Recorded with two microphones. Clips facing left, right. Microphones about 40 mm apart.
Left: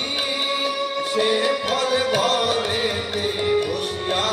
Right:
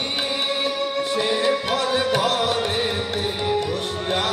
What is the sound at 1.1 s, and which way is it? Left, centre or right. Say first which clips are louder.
Music: left 2 dB; left.